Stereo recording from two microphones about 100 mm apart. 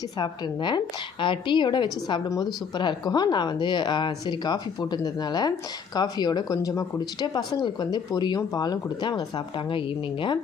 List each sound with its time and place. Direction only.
0.2 s speech: 50° left (ahead or behind)